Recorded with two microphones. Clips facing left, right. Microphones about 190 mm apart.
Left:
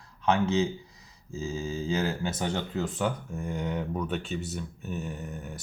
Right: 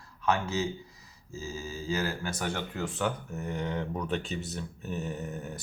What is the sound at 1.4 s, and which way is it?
Speech, 25° left (ahead or behind).